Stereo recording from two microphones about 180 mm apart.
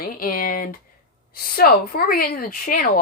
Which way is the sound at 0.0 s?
50° left (ahead or behind).